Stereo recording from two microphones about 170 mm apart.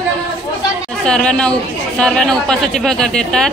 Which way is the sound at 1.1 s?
5° left (ahead or behind).